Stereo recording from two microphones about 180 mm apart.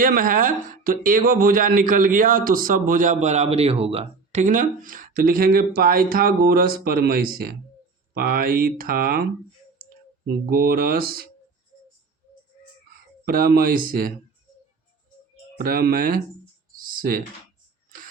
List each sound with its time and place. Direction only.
0.0 s speech: 50° right (ahead or behind)
10.2 s speech: 55° right (ahead or behind)
13.2 s speech: 55° right (ahead or behind)
15.5 s speech: 55° right (ahead or behind)
16.7 s computer keyboard: 50° right (ahead or behind)
17.9 s a sound: 50° right (ahead or behind)